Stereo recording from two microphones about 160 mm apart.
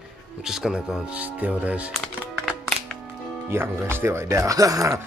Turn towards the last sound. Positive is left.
turn(degrees=-20)  # may be behind; listen again after turning